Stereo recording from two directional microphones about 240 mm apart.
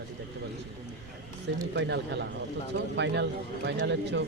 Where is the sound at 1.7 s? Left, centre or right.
Right.